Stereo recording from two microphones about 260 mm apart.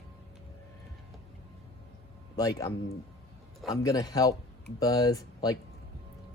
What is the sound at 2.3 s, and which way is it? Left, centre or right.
Speech, centre.